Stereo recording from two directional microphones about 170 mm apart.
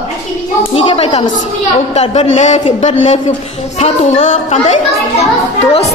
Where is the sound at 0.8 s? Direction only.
40° left (ahead or behind).